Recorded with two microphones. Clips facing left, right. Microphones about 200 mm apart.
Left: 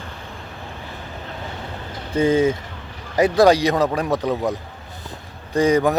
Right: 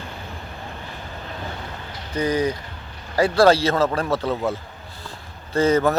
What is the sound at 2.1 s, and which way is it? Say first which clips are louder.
Speech: left 5 dB; 25° left (ahead or behind).